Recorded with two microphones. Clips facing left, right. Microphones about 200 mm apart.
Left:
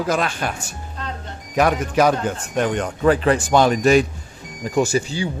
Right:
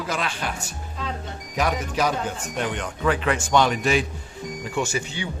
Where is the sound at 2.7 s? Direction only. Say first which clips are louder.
Left 7 dB; 40° left (ahead or behind).